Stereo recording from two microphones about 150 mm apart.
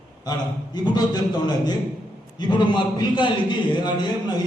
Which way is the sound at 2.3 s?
30° left (ahead or behind).